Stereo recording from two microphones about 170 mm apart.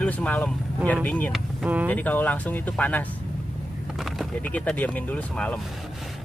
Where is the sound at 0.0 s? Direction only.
10° left (ahead or behind).